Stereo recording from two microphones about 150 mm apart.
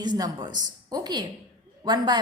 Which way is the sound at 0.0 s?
30° right (ahead or behind).